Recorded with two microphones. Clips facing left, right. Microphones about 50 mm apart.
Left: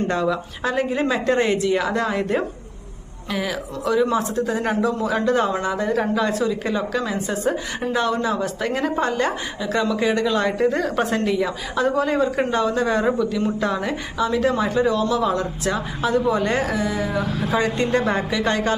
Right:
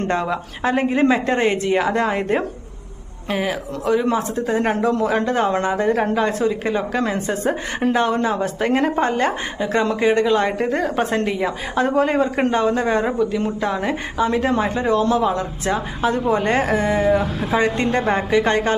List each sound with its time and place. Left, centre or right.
0.1 s a woman's voice: right
4.7 s a man's voice: right
5.1 s a woman's voice: right
14.3 s a woman's voice: right
17.1 s a woman's voice: right